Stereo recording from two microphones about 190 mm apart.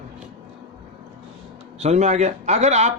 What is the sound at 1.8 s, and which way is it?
Speech, 35° right (ahead or behind).